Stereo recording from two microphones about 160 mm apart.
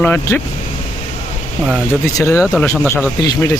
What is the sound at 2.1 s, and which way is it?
Speech, 20° left (ahead or behind).